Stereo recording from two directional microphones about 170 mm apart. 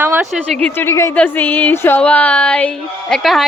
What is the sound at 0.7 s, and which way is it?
Speech, 15° left (ahead or behind).